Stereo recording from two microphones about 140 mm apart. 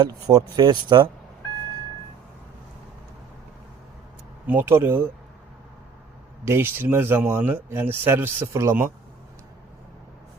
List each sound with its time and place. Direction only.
0.0 s speech: 30° right (ahead or behind)
4.4 s speech: 15° right (ahead or behind)
6.4 s speech: 15° right (ahead or behind)